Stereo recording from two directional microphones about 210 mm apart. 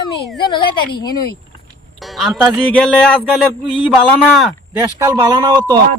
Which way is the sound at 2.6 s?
5° left (ahead or behind).